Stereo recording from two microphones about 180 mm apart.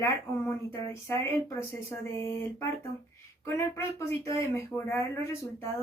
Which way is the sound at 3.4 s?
15° left (ahead or behind).